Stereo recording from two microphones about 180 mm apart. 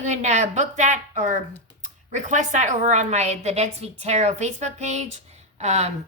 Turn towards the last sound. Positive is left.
turn(degrees=-40)  # may be behind; listen again after turning